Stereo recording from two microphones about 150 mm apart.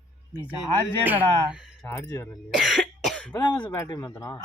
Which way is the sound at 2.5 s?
Centre (ahead or behind).